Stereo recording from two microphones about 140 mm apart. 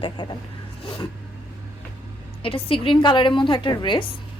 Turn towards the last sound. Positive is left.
turn(degrees=35)  # may be behind; listen again after turning